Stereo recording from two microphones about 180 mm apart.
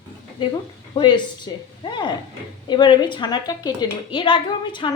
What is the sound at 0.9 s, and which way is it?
A woman's voice, 25° left (ahead or behind).